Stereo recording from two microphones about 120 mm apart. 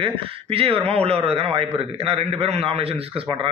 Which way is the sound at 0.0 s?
50° right (ahead or behind).